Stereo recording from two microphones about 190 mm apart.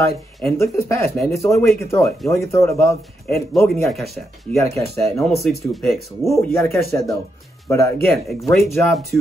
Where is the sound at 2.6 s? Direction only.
15° left (ahead or behind).